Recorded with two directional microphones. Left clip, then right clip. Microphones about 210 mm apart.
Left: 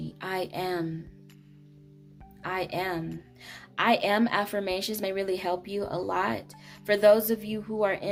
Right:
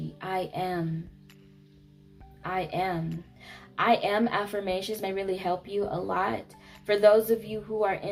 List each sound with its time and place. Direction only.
0.2 s music: 45° left (ahead or behind)
2.4 s a woman's voice: 45° left (ahead or behind)